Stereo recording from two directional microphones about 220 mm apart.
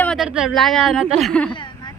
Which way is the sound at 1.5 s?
20° left (ahead or behind).